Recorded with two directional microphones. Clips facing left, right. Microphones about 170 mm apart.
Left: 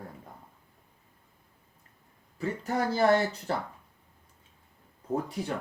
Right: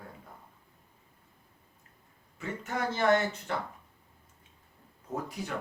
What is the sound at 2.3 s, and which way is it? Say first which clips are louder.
Speech: left 5 dB; 35° left (ahead or behind).